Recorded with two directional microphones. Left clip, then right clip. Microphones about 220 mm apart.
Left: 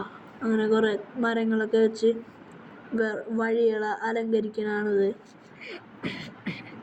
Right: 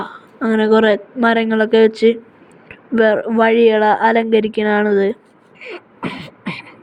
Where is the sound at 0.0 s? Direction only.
35° right (ahead or behind).